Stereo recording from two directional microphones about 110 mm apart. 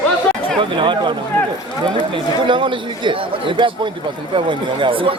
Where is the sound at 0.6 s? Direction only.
50° right (ahead or behind).